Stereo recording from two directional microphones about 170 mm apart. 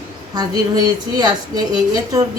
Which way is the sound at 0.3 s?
25° right (ahead or behind).